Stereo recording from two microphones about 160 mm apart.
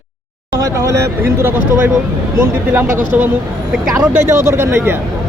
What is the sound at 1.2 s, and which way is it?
Speech, 15° right (ahead or behind).